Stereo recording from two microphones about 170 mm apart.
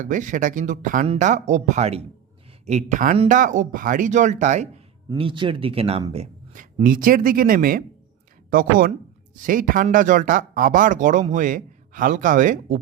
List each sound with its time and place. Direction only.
0.0 s speech: 50° right (ahead or behind)
5.1 s speech: 30° right (ahead or behind)
6.1 s speech: 50° right (ahead or behind)